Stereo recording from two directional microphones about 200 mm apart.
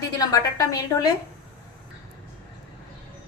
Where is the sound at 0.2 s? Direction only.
15° left (ahead or behind).